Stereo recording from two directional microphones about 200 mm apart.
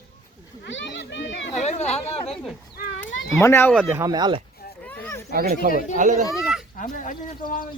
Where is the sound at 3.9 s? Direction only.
15° right (ahead or behind).